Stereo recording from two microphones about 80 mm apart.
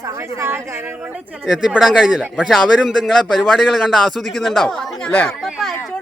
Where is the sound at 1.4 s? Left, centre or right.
Centre.